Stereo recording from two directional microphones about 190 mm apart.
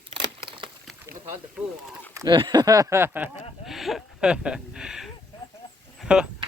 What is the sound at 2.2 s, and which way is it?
Speech, 25° right (ahead or behind).